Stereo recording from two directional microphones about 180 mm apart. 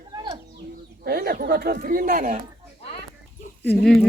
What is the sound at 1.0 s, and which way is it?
Speech, 60° right (ahead or behind).